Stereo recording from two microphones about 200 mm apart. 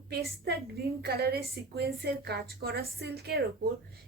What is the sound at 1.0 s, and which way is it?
A woman's voice, 50° right (ahead or behind).